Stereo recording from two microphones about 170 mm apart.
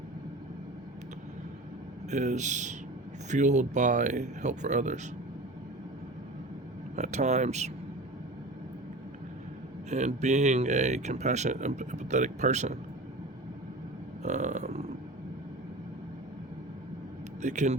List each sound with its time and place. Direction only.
2.0 s speech: 45° right (ahead or behind)
6.9 s speech: 45° right (ahead or behind)
9.9 s speech: 40° right (ahead or behind)
14.2 s a sound: 45° right (ahead or behind)
17.4 s speech: 45° right (ahead or behind)